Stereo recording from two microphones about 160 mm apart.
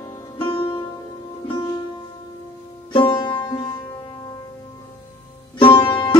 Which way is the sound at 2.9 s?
30° left (ahead or behind).